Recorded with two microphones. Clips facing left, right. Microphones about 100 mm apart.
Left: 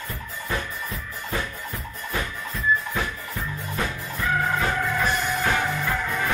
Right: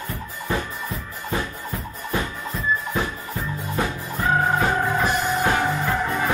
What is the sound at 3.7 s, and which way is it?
Music, 30° right (ahead or behind).